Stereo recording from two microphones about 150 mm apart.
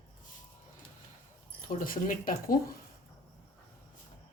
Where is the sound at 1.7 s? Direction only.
65° left (ahead or behind).